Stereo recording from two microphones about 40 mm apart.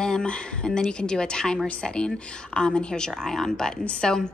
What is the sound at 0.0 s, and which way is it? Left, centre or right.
A woman's voice, left.